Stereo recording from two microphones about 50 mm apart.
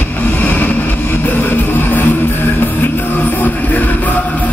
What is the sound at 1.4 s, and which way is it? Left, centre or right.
Music, left.